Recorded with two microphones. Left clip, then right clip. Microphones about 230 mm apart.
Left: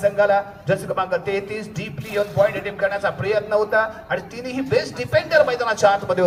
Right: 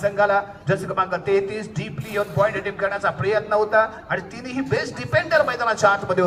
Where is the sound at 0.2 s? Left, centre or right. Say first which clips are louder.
Left 1 dB; left.